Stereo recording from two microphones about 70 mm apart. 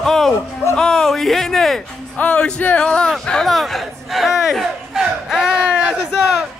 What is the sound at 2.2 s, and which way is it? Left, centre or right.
Speech, centre.